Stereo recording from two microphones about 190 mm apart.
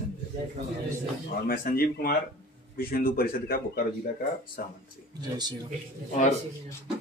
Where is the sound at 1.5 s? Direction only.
50° left (ahead or behind).